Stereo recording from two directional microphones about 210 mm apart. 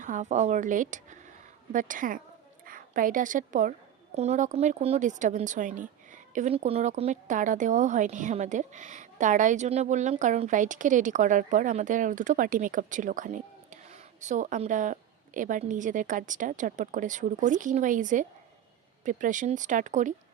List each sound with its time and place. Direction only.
0.0 s a woman's voice: 35° right (ahead or behind)